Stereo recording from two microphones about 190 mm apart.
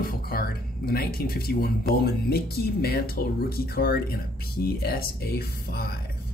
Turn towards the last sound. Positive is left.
turn(degrees=55)  # may be behind; listen again after turning